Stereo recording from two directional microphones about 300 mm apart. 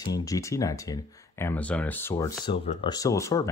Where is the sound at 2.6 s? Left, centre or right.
Left.